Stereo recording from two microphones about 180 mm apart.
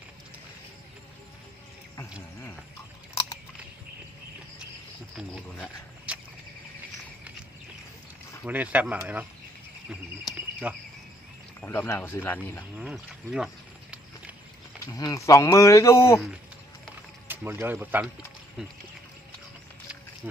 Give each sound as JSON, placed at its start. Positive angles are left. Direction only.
{"t": 6.1, "sound": "a sound", "side_deg": -5}
{"t": 8.4, "sound": "speech", "side_deg": -10}
{"t": 10.6, "sound": "speech", "side_deg": -10}
{"t": 11.6, "sound": "speech", "side_deg": 10}
{"t": 12.7, "sound": "speech", "side_deg": -5}
{"t": 14.8, "sound": "speech", "side_deg": 20}
{"t": 17.2, "sound": "speech", "side_deg": -10}